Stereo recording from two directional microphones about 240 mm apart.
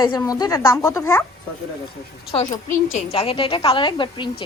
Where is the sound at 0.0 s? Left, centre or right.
Centre.